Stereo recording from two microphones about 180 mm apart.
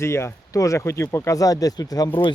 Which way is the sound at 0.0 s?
15° left (ahead or behind).